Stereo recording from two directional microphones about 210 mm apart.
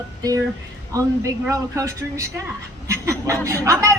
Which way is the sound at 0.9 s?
15° right (ahead or behind).